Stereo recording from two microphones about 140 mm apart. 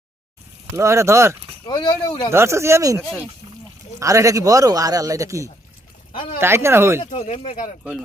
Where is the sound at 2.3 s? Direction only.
20° right (ahead or behind).